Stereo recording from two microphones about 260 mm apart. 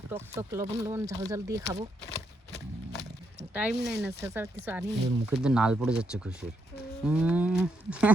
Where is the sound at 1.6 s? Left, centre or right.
Right.